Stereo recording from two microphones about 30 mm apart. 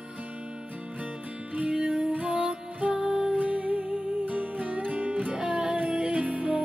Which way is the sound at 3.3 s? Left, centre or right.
Right.